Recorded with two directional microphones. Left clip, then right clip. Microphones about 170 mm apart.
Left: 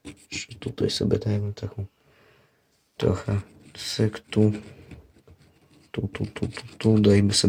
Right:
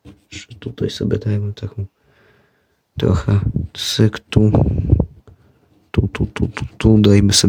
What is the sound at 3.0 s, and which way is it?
Speech, 60° right (ahead or behind).